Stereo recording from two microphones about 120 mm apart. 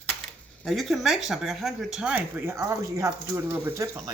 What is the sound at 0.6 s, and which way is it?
Speech, centre (ahead or behind).